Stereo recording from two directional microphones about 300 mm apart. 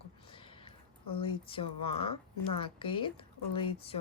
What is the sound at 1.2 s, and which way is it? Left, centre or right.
Speech, centre.